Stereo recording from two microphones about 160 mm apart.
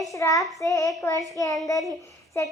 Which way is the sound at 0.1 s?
20° left (ahead or behind).